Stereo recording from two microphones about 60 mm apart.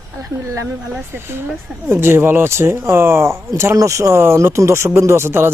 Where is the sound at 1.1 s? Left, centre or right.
Right.